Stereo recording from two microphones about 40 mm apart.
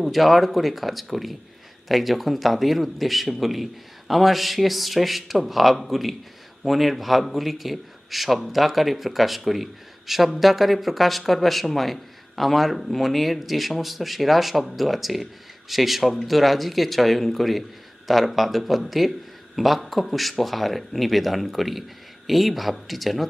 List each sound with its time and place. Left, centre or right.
0.0 s speech: centre